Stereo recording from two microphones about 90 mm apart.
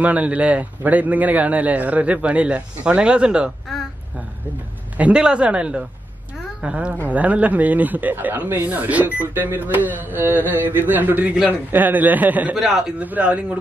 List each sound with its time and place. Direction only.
0.0 s a man's voice: 15° right (ahead or behind)
4.9 s a man's voice: 15° right (ahead or behind)
12.5 s a man's voice: 5° right (ahead or behind)
13.0 s a man's voice: 15° right (ahead or behind)